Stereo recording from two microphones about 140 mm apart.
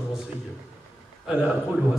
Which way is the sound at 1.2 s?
5° right (ahead or behind).